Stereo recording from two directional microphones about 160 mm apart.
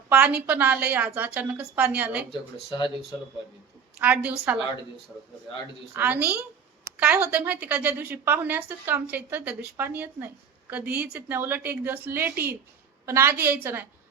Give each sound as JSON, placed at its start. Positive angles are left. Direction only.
{"t": 0.1, "sound": "a woman's voice", "side_deg": -10}
{"t": 2.6, "sound": "speech", "side_deg": 30}
{"t": 4.0, "sound": "a woman's voice", "side_deg": -10}
{"t": 5.9, "sound": "a woman's voice", "side_deg": -10}